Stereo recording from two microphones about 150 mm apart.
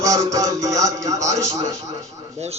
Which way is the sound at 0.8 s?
20° right (ahead or behind).